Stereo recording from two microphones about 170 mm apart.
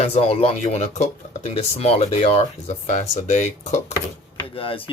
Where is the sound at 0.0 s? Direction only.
35° left (ahead or behind).